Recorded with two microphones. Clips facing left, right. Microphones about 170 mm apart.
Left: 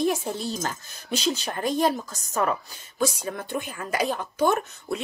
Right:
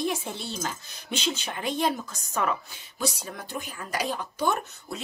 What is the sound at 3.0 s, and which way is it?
A woman's voice, 50° left (ahead or behind).